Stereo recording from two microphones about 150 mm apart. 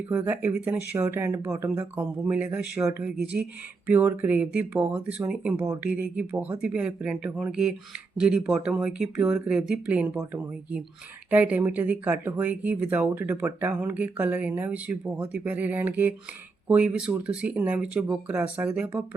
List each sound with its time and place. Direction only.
0.0 s speech: 10° right (ahead or behind)
11.3 s speech: 10° right (ahead or behind)